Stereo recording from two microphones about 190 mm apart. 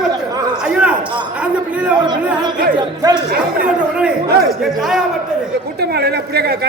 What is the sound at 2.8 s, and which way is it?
Speech, 20° right (ahead or behind).